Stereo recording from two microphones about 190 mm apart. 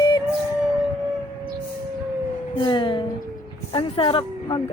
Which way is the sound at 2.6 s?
25° left (ahead or behind).